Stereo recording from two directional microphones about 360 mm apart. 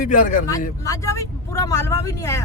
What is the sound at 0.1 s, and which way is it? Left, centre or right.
Speech, left.